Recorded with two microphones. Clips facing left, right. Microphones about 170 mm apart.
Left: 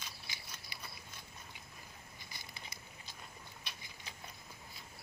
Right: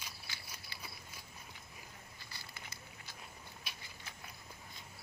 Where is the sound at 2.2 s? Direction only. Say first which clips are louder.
Left 1 dB; 15° left (ahead or behind).